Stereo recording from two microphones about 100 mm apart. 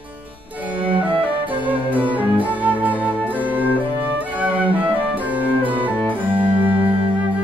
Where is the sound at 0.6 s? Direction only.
15° right (ahead or behind).